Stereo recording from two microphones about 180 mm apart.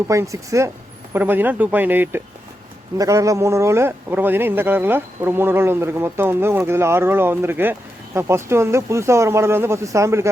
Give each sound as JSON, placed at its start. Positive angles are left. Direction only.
{"t": 0.1, "sound": "a man's voice", "side_deg": -15}